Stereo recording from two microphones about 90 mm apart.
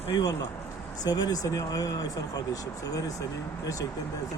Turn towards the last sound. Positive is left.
turn(degrees=40)  # may be behind; listen again after turning